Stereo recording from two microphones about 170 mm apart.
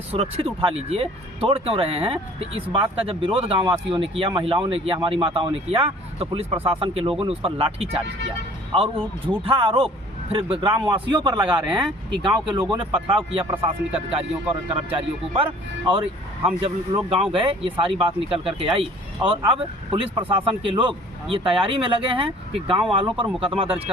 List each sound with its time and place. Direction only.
0.1 s speech: 35° right (ahead or behind)
9.4 s a man's voice: 35° right (ahead or behind)
15.4 s speech: 30° right (ahead or behind)
23.6 s speech: 10° right (ahead or behind)